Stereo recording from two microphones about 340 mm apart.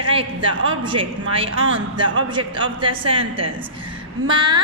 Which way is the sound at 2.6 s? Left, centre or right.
Centre.